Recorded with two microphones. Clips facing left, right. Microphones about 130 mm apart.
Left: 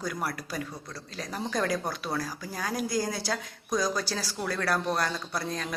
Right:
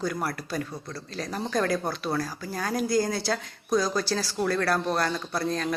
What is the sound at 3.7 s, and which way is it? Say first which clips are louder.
Speech: right 3 dB; 5° right (ahead or behind).